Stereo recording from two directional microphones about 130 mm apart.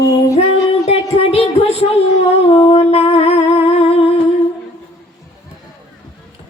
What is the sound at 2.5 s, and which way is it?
Humming, 50° left (ahead or behind).